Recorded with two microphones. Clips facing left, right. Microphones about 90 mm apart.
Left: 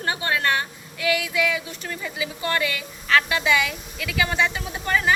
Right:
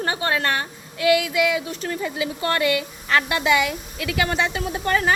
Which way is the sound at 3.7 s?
40° right (ahead or behind).